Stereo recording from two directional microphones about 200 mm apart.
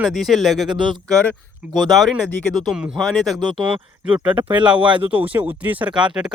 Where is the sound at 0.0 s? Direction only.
Centre (ahead or behind).